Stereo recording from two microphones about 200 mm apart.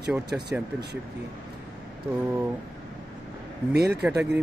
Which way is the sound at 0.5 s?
10° right (ahead or behind).